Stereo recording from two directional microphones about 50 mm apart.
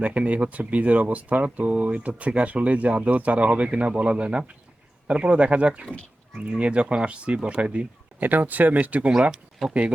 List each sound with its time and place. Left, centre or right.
0.0 s speech: right
8.2 s speech: right